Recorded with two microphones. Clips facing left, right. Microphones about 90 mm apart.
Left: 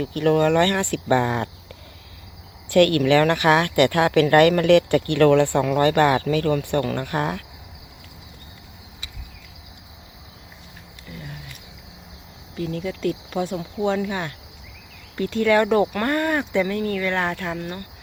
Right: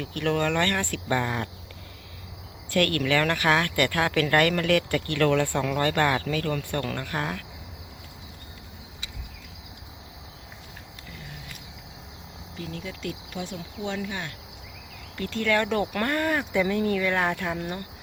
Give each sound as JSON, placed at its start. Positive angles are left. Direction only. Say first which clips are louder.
{"t": 0.2, "sound": "speech", "louder": "left 7 dB", "side_deg": 15}
{"t": 2.7, "sound": "speech", "louder": "left 8 dB", "side_deg": 25}
{"t": 12.5, "sound": "speech", "louder": "left 9 dB", "side_deg": 45}
{"t": 15.2, "sound": "speech", "louder": "left 7 dB", "side_deg": 20}
{"t": 15.9, "sound": "speech", "louder": "left 4 dB", "side_deg": 5}